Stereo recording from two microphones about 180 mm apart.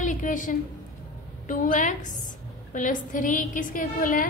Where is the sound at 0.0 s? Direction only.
45° left (ahead or behind).